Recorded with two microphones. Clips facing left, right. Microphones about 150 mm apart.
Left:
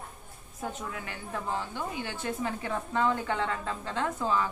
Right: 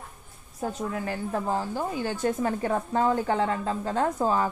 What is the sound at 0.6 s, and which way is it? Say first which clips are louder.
A woman's voice: right 6 dB; 40° right (ahead or behind).